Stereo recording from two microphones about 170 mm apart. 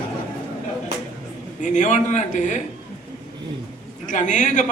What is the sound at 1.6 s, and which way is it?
Speech, 45° left (ahead or behind).